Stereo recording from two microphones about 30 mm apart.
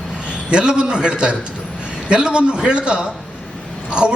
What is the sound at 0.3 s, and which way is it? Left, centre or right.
A man's voice, right.